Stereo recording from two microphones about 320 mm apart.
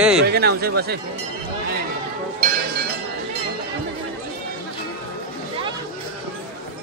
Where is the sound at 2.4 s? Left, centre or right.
Right.